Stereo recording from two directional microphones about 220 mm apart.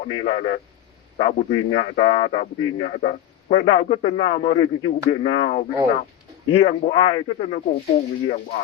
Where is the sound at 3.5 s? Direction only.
25° left (ahead or behind).